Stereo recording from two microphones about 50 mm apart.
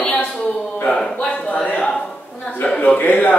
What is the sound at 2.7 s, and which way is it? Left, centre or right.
Speech, left.